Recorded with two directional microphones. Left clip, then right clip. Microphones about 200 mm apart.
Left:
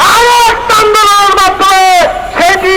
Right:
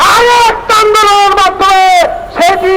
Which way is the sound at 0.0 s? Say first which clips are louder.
Even; 40° right (ahead or behind).